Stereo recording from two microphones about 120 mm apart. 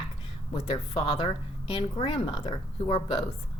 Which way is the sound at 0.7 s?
45° left (ahead or behind).